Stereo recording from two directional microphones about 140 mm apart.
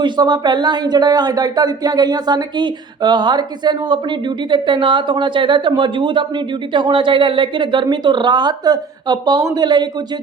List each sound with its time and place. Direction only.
0.0 s a woman's voice: 30° right (ahead or behind)